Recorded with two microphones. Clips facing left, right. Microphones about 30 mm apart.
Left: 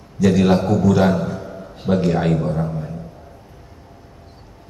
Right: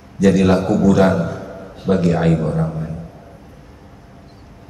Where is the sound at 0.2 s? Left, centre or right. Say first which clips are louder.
Right 2 dB; centre.